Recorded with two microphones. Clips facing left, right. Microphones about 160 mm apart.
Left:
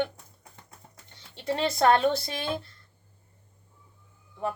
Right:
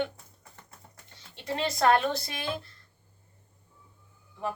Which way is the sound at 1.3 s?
30° left (ahead or behind).